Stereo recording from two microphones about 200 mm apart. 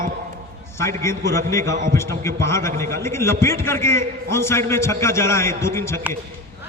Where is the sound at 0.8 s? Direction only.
15° left (ahead or behind).